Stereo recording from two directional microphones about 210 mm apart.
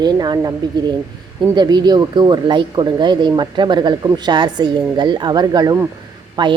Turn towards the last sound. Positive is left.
turn(degrees=-20)  # may be behind; listen again after turning